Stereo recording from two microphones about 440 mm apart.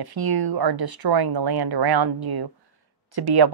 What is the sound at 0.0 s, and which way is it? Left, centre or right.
Speech, right.